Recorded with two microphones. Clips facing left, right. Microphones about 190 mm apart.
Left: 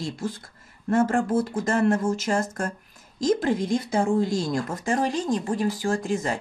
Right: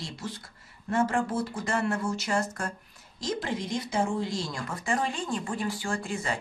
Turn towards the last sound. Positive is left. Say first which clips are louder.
# left 6 dB
turn(degrees=45)  # may be behind; listen again after turning